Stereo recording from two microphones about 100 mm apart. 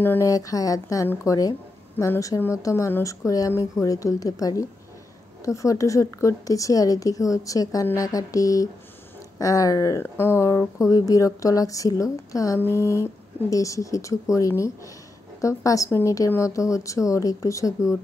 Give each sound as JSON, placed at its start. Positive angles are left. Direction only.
{"t": 0.0, "sound": "speech", "side_deg": 20}
{"t": 0.3, "sound": "speech", "side_deg": 35}